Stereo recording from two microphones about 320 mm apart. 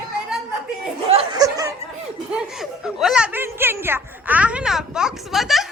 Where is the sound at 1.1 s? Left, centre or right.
Centre.